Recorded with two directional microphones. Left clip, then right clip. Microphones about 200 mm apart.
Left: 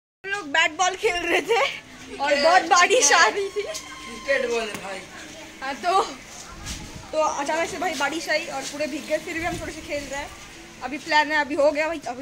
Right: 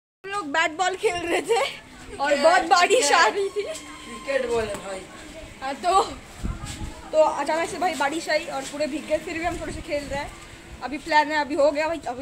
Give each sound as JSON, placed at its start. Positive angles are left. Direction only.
{"t": 0.2, "sound": "a sound", "side_deg": -20}
{"t": 0.9, "sound": "speech", "side_deg": 0}
{"t": 2.1, "sound": "speech", "side_deg": -5}
{"t": 5.6, "sound": "speech", "side_deg": 5}
{"t": 7.2, "sound": "speech", "side_deg": -5}